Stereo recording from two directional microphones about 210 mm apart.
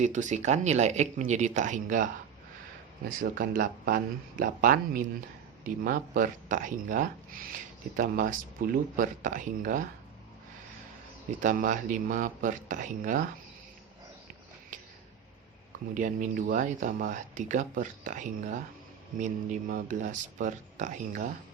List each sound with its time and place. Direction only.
0.0 s speech: 35° right (ahead or behind)
3.2 s speech: 40° right (ahead or behind)
11.3 s speech: 40° right (ahead or behind)
14.7 s a sound: 40° right (ahead or behind)
16.0 s speech: 40° right (ahead or behind)